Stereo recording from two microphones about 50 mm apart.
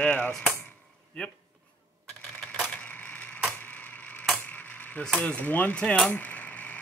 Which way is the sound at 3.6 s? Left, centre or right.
Left.